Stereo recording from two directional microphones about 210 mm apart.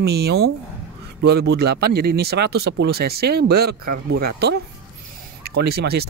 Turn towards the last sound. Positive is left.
turn(degrees=-50)  # may be behind; listen again after turning